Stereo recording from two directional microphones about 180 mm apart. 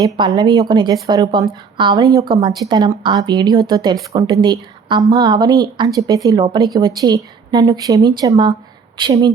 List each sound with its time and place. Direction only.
0.0 s speech: 25° right (ahead or behind)